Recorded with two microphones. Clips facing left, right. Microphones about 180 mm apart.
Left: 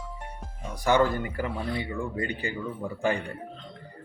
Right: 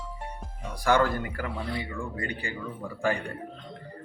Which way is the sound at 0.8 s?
20° left (ahead or behind).